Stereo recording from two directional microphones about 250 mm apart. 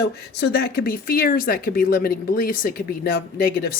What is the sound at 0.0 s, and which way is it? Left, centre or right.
Speech, left.